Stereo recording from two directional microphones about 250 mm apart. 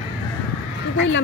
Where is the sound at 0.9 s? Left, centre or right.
Left.